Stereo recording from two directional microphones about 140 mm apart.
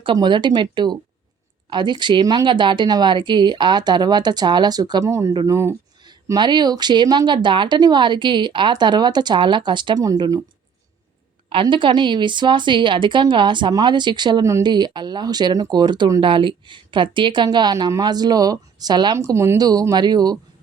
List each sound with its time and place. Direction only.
0.0 s speech: 35° right (ahead or behind)
11.4 s a woman's voice: 35° right (ahead or behind)